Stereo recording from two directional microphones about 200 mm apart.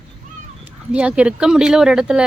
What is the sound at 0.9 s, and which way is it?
Speech, 5° right (ahead or behind).